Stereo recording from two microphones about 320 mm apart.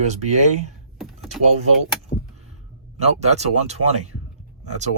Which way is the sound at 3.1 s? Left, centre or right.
Right.